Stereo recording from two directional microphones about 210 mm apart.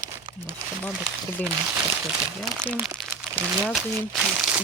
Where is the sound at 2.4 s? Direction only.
5° right (ahead or behind).